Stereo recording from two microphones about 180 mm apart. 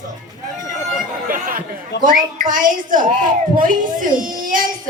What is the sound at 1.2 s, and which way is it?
Chatter, 50° right (ahead or behind).